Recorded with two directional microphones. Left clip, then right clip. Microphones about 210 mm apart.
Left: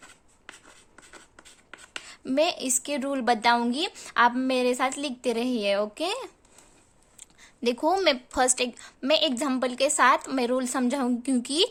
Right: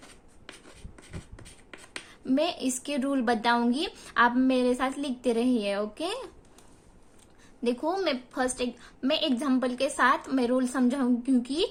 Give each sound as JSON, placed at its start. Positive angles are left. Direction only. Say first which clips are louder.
{"t": 0.0, "sound": "writing", "louder": "left 1 dB", "side_deg": 0}
{"t": 2.2, "sound": "a woman's voice", "louder": "left 3 dB", "side_deg": 35}
{"t": 7.6, "sound": "a woman's voice", "louder": "left 5 dB", "side_deg": 35}